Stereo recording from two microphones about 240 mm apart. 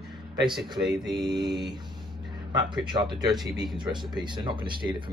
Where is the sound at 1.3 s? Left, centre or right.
Centre.